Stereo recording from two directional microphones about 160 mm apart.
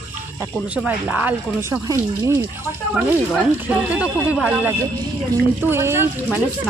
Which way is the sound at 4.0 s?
5° right (ahead or behind).